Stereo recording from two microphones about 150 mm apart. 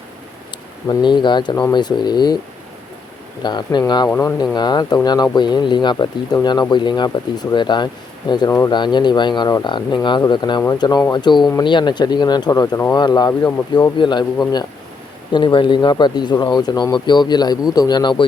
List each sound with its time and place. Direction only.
0.9 s speech: 30° left (ahead or behind)
3.4 s speech: 30° left (ahead or behind)
4.1 s speech: 15° left (ahead or behind)
4.5 s speech: 30° left (ahead or behind)